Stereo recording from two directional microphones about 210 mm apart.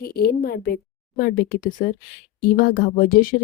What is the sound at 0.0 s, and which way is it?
A woman's voice, 45° left (ahead or behind).